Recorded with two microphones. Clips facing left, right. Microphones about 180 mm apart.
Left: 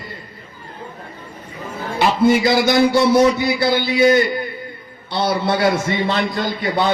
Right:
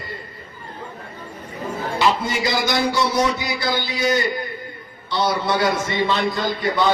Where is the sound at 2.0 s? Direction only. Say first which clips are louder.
Left 7 dB; 55° left (ahead or behind).